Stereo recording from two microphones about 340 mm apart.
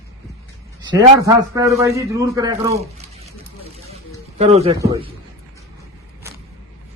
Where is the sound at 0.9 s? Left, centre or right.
Centre.